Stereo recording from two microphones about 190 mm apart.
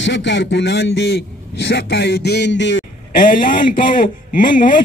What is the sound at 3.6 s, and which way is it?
Speech, 45° left (ahead or behind).